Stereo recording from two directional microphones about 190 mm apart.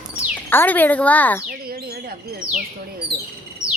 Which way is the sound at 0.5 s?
10° left (ahead or behind).